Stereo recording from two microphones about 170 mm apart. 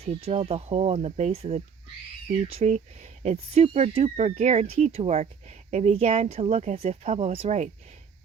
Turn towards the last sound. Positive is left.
turn(degrees=-40)  # may be behind; listen again after turning